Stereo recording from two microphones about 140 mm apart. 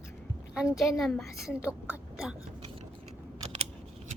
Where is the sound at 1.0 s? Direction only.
5° left (ahead or behind).